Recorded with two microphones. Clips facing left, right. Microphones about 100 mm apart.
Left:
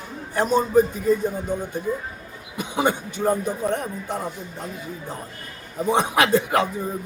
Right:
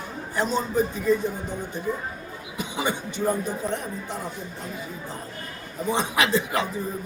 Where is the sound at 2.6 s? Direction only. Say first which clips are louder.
Left 5 dB; 50° left (ahead or behind).